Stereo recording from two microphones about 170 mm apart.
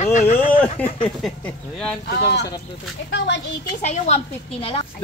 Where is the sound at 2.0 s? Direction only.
80° left.